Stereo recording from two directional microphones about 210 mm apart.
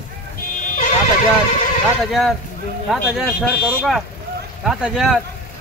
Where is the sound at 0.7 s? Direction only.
40° left (ahead or behind).